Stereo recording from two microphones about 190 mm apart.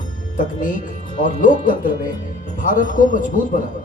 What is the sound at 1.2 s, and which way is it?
A man's voice, 45° left (ahead or behind).